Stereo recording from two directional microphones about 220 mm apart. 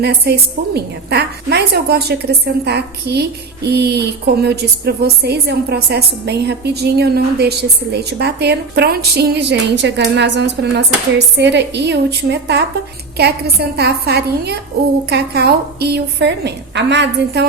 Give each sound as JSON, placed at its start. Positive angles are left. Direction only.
{"t": 0.0, "sound": "a woman's voice", "side_deg": -50}